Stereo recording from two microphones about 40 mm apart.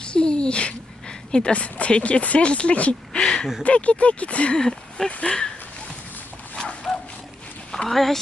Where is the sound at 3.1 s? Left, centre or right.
Centre.